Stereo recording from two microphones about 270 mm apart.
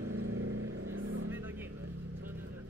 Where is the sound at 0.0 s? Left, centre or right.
Right.